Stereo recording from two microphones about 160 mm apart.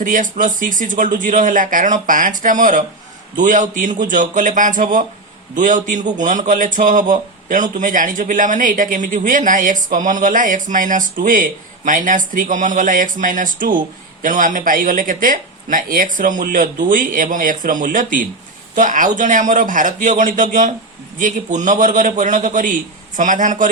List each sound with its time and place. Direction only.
0.0 s a man's voice: 55° right (ahead or behind)